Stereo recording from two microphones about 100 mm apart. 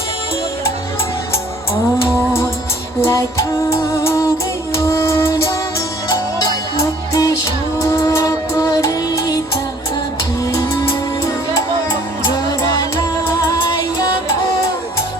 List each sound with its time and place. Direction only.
3.0 s music: 30° left (ahead or behind)
7.1 s music: 35° left (ahead or behind)
10.5 s music: 30° left (ahead or behind); by 13.7 s 45° left (ahead or behind)